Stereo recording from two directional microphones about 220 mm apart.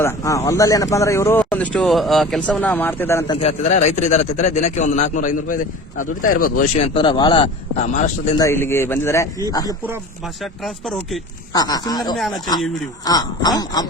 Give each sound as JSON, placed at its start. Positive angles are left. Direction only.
{"t": 0.0, "sound": "speech", "side_deg": 15}
{"t": 3.3, "sound": "speech", "side_deg": 30}
{"t": 7.9, "sound": "speech", "side_deg": 30}
{"t": 8.4, "sound": "speech", "side_deg": 10}
{"t": 9.8, "sound": "speech", "side_deg": -5}
{"t": 11.5, "sound": "speech", "side_deg": 15}